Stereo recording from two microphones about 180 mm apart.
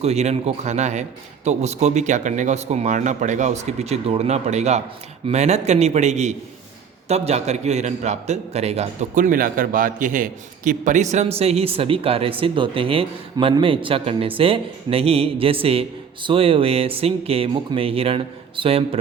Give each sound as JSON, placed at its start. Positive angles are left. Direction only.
{"t": 0.0, "sound": "a man's voice", "side_deg": -35}